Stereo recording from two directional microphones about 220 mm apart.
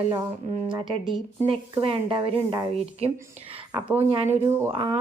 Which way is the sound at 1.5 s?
25° right (ahead or behind).